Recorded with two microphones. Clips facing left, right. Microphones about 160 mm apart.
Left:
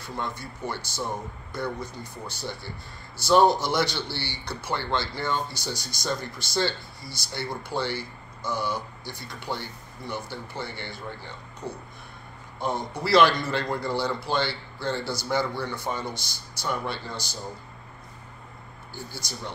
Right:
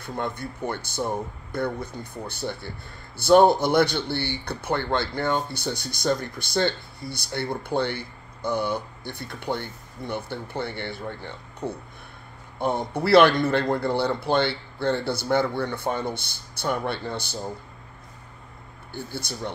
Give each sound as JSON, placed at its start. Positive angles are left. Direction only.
{"t": 0.0, "sound": "speech", "side_deg": -55}
{"t": 18.9, "sound": "speech", "side_deg": -55}